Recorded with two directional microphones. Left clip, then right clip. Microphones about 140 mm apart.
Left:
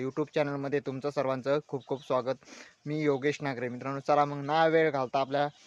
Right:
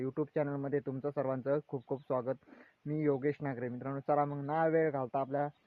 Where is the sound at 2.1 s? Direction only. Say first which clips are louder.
Left 6 dB; 20° left (ahead or behind).